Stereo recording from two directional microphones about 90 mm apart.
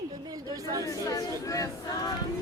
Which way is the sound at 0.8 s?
40° left (ahead or behind).